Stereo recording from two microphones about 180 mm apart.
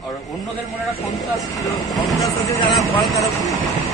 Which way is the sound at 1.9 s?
Centre (ahead or behind).